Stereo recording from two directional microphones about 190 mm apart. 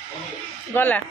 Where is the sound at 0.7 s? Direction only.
10° left (ahead or behind).